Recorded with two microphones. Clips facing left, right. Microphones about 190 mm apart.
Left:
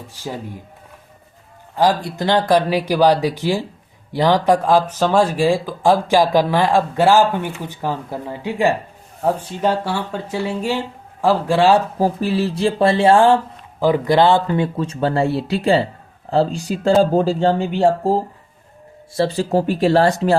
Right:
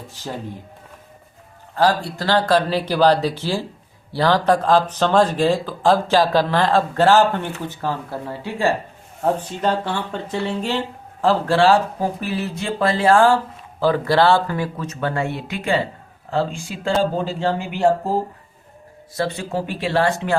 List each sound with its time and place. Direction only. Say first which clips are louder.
0.1 s speech: left 2 dB; 10° left (ahead or behind)
1.7 s speech: left 1 dB; 15° left (ahead or behind)
11.9 s speech: left 5 dB; 30° left (ahead or behind)
19.1 s speech: left 6 dB; 30° left (ahead or behind)